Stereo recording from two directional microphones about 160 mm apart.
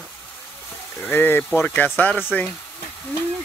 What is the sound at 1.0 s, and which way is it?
Speech, 10° left (ahead or behind).